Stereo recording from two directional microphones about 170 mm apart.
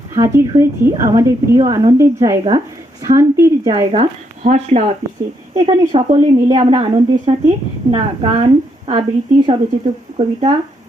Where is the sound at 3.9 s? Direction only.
40° right (ahead or behind).